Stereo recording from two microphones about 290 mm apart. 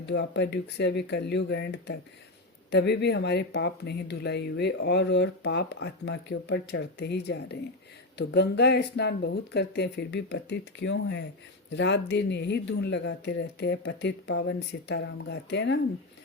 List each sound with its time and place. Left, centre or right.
0.0 s speech: left